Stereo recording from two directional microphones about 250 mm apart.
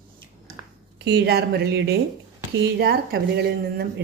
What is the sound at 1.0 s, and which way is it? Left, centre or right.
A woman's voice, right.